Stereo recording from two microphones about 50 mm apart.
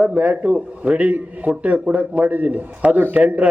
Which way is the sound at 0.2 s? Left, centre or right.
Right.